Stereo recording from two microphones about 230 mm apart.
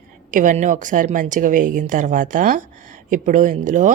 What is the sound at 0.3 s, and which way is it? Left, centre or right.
Speech, right.